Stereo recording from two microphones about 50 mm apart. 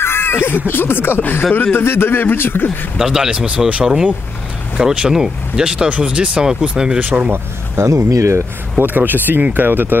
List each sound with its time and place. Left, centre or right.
0.0 s speech: left
3.0 s speech: centre
3.8 s speech: centre
7.0 s speech: right
7.7 s speech: right
8.7 s speech: right